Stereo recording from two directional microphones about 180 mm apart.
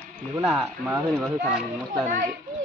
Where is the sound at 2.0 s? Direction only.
45° right (ahead or behind).